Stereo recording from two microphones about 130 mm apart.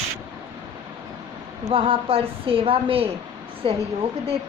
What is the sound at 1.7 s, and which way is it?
A woman's voice, 45° right (ahead or behind).